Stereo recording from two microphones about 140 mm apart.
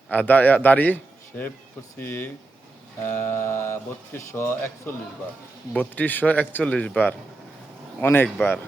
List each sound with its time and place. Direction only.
0.1 s speech: 10° left (ahead or behind)
2.0 s speech: 15° left (ahead or behind)
5.7 s speech: 10° left (ahead or behind)